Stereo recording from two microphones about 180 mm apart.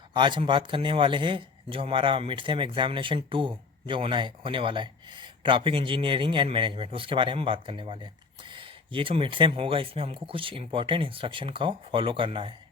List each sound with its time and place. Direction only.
0.1 s speech: 25° right (ahead or behind)